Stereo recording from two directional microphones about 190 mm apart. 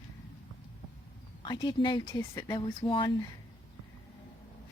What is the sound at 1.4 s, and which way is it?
Speech, 20° left (ahead or behind).